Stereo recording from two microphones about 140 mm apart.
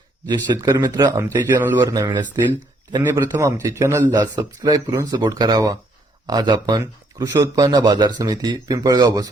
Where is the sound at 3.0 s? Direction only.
20° right (ahead or behind).